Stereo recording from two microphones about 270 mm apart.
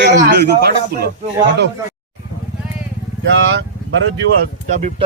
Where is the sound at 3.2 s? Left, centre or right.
Right.